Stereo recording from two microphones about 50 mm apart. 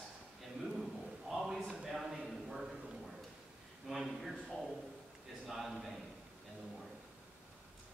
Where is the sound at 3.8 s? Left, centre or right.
Centre.